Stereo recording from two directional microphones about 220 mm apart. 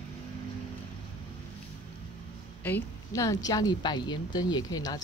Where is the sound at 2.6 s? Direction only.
10° left (ahead or behind).